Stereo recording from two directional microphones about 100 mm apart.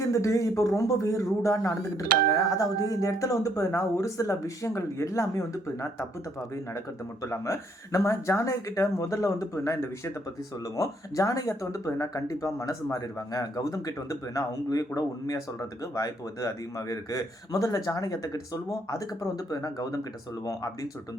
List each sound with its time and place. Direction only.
0.1 s a man's voice: 30° left (ahead or behind)